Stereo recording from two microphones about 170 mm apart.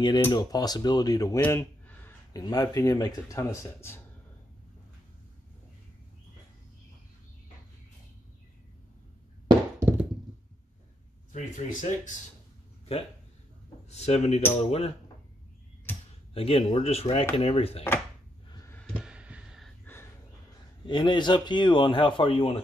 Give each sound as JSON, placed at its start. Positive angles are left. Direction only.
{"t": 0.3, "sound": "a man's voice", "side_deg": 25}
{"t": 1.4, "sound": "a sound", "side_deg": 10}
{"t": 2.4, "sound": "a man's voice", "side_deg": 20}
{"t": 9.5, "sound": "thunk", "side_deg": -15}
{"t": 11.3, "sound": "speech", "side_deg": 45}
{"t": 13.8, "sound": "speech", "side_deg": 40}
{"t": 16.3, "sound": "speech", "side_deg": 35}
{"t": 18.5, "sound": "a sound", "side_deg": 20}
{"t": 18.9, "sound": "a sound", "side_deg": -5}
{"t": 19.8, "sound": "crow", "side_deg": 10}
{"t": 20.8, "sound": "a man's voice", "side_deg": 25}